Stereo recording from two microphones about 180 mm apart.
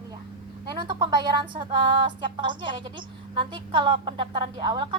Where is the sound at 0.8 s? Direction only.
25° right (ahead or behind).